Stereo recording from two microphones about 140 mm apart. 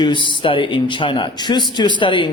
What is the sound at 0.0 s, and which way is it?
A man's voice, 35° left (ahead or behind).